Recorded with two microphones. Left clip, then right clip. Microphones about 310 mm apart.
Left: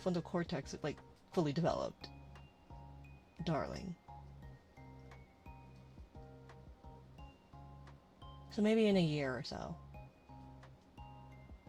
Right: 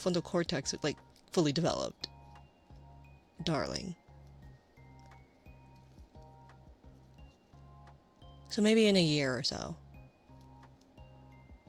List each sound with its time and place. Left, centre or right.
0.0 s speech: right
3.4 s speech: right
8.4 s speech: right